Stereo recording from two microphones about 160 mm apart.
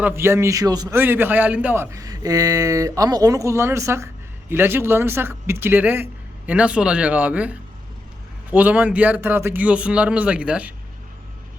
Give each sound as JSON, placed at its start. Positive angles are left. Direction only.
{"t": 0.0, "sound": "a man's voice", "side_deg": -15}
{"t": 0.9, "sound": "a man's voice", "side_deg": -15}